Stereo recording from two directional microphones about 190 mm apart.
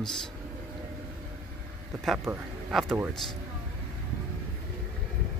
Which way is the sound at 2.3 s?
15° right (ahead or behind).